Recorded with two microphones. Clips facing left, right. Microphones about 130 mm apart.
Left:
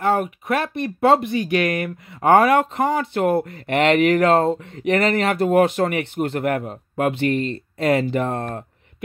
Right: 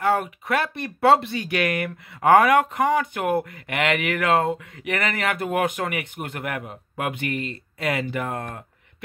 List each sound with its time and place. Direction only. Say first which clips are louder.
0.0 s speech: left 2 dB; 25° left (ahead or behind)